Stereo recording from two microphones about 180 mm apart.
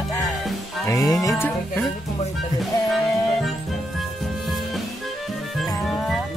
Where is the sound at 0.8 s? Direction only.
20° left (ahead or behind).